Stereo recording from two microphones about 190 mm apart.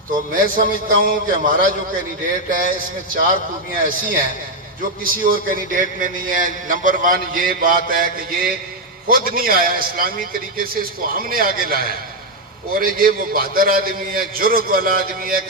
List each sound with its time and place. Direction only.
0.3 s a man's voice: 45° right (ahead or behind)
3.8 s a man's voice: 45° right (ahead or behind)